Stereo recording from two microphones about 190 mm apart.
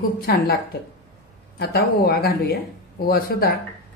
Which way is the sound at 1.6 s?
55° left (ahead or behind).